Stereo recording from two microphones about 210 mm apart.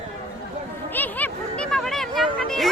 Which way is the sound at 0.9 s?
10° left (ahead or behind).